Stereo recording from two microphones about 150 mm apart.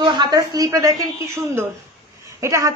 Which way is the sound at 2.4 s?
20° right (ahead or behind).